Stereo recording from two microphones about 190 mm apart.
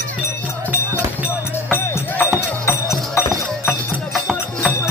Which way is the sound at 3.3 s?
Centre (ahead or behind).